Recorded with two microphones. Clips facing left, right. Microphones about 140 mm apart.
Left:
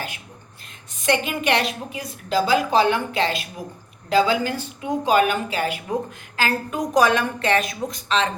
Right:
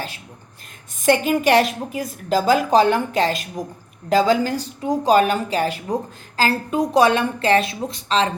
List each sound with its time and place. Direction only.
1.0 s a woman's voice: 45° right (ahead or behind)